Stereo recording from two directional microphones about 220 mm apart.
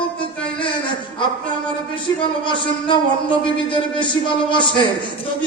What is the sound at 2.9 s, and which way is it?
Speech, 20° left (ahead or behind).